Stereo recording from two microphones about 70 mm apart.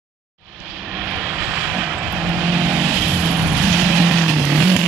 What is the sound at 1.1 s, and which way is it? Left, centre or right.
Vehicle, centre.